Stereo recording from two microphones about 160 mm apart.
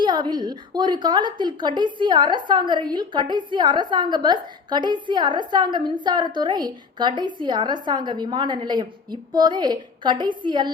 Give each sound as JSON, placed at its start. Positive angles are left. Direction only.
{"t": 0.0, "sound": "a woman's voice", "side_deg": -25}